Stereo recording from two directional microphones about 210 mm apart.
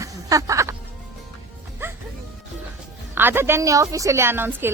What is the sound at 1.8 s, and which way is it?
Music, 10° right (ahead or behind).